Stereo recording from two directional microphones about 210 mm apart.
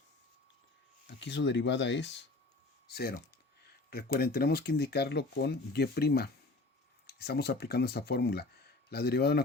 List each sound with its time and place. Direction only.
1.2 s speech: 55° left (ahead or behind)